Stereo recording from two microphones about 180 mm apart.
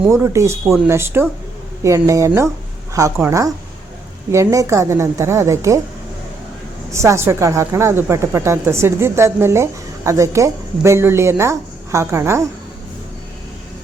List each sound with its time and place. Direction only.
0.0 s a woman's voice: 15° right (ahead or behind)
6.9 s a woman's voice: 15° right (ahead or behind)